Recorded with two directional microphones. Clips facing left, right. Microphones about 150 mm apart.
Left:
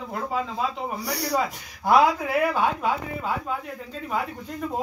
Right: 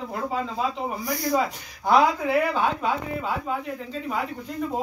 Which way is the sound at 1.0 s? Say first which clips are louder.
Right 1 dB; 75° left (ahead or behind).